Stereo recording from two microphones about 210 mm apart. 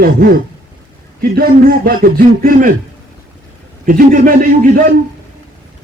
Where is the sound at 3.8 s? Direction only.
40° right (ahead or behind).